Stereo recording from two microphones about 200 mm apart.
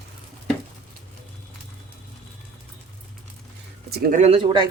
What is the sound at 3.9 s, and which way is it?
Speech, 45° right (ahead or behind).